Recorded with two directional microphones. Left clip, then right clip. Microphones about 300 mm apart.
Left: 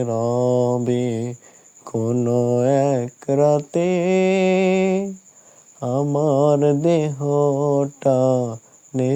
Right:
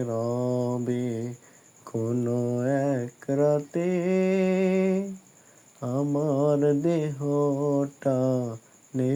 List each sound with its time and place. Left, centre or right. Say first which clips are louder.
0.0 s speech: left 8 dB; left